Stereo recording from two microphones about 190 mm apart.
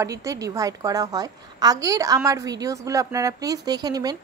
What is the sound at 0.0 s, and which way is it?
A woman's voice, 15° right (ahead or behind).